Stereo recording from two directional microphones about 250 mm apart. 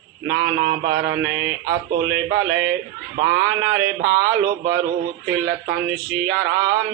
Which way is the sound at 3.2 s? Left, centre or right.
Right.